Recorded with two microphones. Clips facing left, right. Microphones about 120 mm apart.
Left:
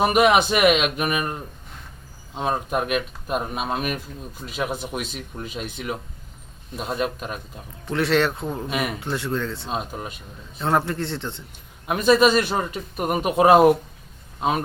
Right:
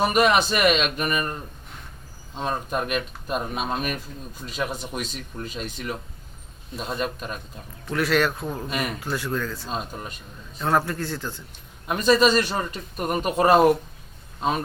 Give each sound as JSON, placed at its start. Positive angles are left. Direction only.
{"t": 0.0, "sound": "a man's voice", "side_deg": 10}
{"t": 7.9, "sound": "speech", "side_deg": 25}
{"t": 8.5, "sound": "speech", "side_deg": 5}
{"t": 9.0, "sound": "speech", "side_deg": 25}
{"t": 9.6, "sound": "a man's voice", "side_deg": 10}
{"t": 10.6, "sound": "speech", "side_deg": 25}
{"t": 11.9, "sound": "a man's voice", "side_deg": 10}